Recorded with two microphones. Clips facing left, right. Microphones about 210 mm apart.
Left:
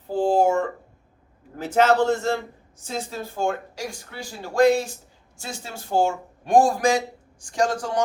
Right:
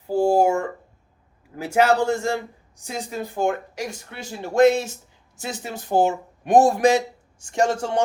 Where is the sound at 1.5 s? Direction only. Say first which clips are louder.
Even; 10° right (ahead or behind).